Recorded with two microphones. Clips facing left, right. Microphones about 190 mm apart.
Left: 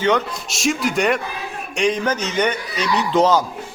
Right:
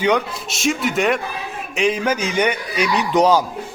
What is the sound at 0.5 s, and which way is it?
A man's voice, centre (ahead or behind).